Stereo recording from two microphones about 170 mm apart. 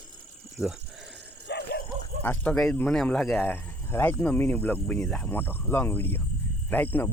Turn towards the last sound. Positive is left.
turn(degrees=10)  # may be behind; listen again after turning